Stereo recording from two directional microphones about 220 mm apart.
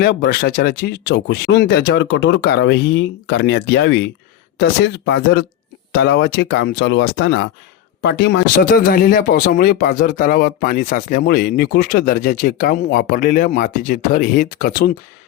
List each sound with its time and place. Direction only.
0.0 s speech: 45° left (ahead or behind)